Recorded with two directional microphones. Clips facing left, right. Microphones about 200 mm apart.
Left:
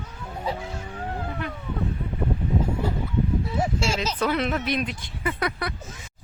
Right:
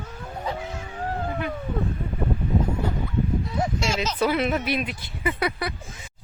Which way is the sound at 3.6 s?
10° left (ahead or behind).